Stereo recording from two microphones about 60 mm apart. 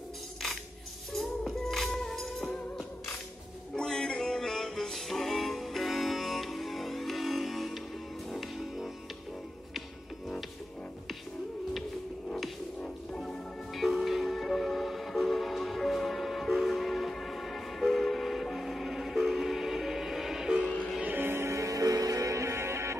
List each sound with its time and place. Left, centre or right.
1.1 s music: centre
3.7 s music: centre
12.3 s music: centre
20.6 s music: left
21.0 s music: right
21.5 s music: right